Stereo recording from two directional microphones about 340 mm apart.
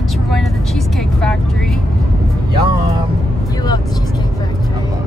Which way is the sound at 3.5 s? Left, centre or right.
Centre.